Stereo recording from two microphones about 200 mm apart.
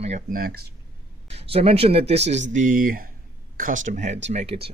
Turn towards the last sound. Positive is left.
turn(degrees=-30)  # may be behind; listen again after turning